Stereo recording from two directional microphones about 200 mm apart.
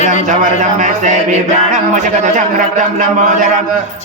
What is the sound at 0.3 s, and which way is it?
Music, 35° right (ahead or behind).